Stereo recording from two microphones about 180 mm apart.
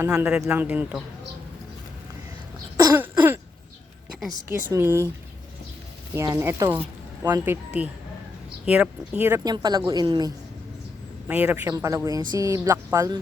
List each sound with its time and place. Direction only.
0.0 s speech: 10° right (ahead or behind)
2.7 s throat clearing: 15° right (ahead or behind)
4.7 s speech: 15° right (ahead or behind)
6.1 s speech: 15° right (ahead or behind)
9.4 s speech: 20° right (ahead or behind)
11.3 s speech: 10° right (ahead or behind)